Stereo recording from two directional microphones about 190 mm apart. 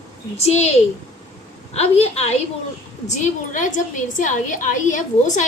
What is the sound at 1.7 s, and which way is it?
A woman's voice, 35° left (ahead or behind).